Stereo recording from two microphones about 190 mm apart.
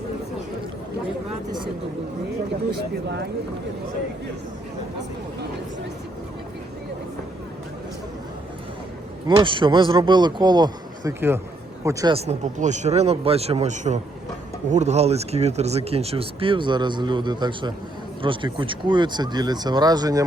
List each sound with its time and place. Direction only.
9.2 s a man's voice: 25° right (ahead or behind)
12.1 s a man's voice: 35° right (ahead or behind)